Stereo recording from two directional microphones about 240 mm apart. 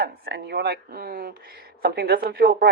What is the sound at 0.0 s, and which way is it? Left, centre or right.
Speech, right.